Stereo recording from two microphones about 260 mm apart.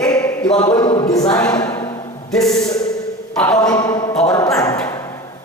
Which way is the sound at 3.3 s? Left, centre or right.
Centre.